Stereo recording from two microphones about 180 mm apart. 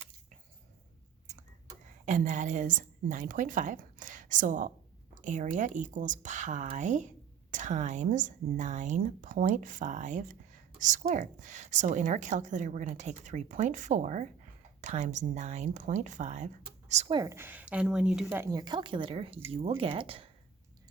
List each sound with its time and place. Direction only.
2.0 s a woman's voice: 40° right (ahead or behind)
17.1 s a woman's voice: 25° right (ahead or behind)
17.3 s speech: 10° right (ahead or behind)
18.6 s a woman's voice: 25° right (ahead or behind)